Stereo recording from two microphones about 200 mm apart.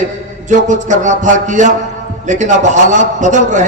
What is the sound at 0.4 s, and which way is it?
A man's voice, 40° right (ahead or behind).